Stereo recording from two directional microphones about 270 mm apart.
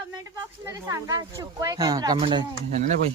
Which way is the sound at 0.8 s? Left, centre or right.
Centre.